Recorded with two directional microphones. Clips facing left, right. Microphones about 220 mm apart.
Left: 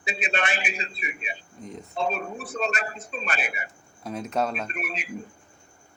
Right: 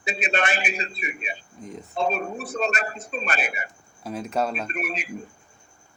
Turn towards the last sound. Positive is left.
turn(degrees=-45)  # may be behind; listen again after turning